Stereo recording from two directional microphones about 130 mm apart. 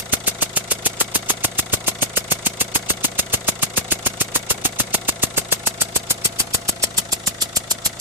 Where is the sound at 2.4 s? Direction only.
15° right (ahead or behind).